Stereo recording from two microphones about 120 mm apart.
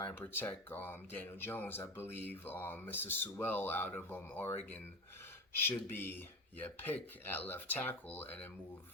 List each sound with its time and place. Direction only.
0.0 s speech: 15° left (ahead or behind)
5.5 s speech: 20° left (ahead or behind)